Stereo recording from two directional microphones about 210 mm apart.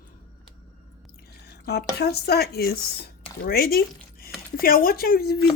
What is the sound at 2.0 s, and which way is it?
Speech, 50° left (ahead or behind).